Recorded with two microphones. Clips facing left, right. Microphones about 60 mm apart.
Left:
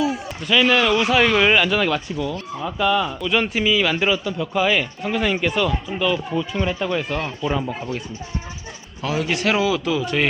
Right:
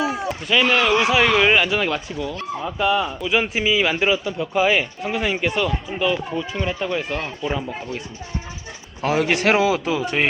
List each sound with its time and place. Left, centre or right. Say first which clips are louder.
0.4 s a man's voice: left 1 dB; centre
9.0 s speech: right 3 dB; right